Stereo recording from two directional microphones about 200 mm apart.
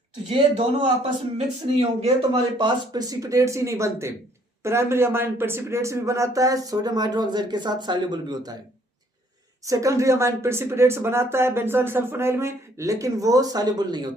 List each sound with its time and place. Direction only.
0.3 s a man's voice: 25° right (ahead or behind)
2.0 s speech: 25° right (ahead or behind)
9.6 s speech: 15° right (ahead or behind)